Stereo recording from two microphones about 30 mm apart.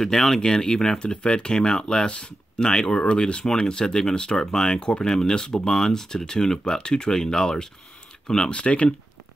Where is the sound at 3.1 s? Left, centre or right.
Left.